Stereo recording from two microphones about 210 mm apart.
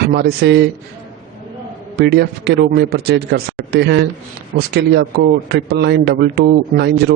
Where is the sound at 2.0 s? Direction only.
50° right (ahead or behind).